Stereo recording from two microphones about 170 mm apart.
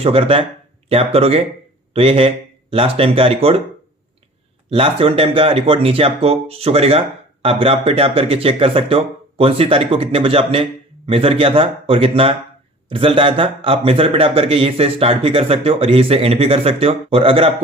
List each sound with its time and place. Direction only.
0.0 s speech: 35° right (ahead or behind)
4.7 s speech: 30° right (ahead or behind)